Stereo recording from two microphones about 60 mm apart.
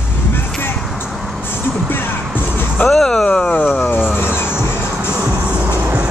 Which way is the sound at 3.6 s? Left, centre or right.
Left.